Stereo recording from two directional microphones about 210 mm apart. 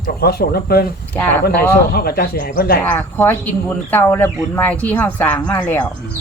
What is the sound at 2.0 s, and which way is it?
Speech, 45° left (ahead or behind).